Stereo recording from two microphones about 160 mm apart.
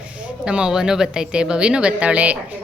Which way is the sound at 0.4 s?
5° right (ahead or behind).